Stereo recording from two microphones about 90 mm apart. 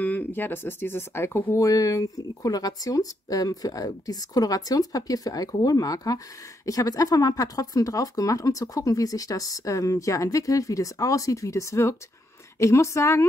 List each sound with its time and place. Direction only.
0.0 s speech: 20° left (ahead or behind)